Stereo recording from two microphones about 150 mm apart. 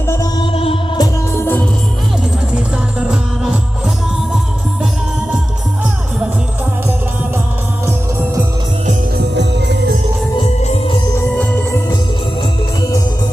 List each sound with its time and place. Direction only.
0.1 s music: 25° left (ahead or behind)
0.4 s music: 40° left (ahead or behind)
0.9 s music: 15° left (ahead or behind)
3.0 s music: 5° right (ahead or behind)
11.1 s music: 15° left (ahead or behind)